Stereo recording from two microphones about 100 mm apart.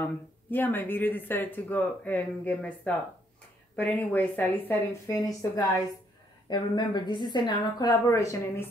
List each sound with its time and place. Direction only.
0.0 s a woman's voice: 20° left (ahead or behind)
5.0 s a woman's voice: 35° left (ahead or behind)
6.5 s a woman's voice: 50° left (ahead or behind)
8.1 s a woman's voice: 30° left (ahead or behind)